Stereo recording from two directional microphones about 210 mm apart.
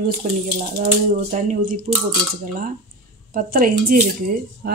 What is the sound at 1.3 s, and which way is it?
Speech, 40° right (ahead or behind).